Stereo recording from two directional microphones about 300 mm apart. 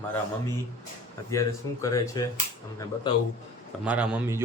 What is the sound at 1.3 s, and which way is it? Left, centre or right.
Speech, centre.